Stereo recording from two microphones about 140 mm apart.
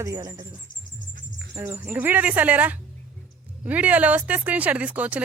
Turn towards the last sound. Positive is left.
turn(degrees=-10)  # may be behind; listen again after turning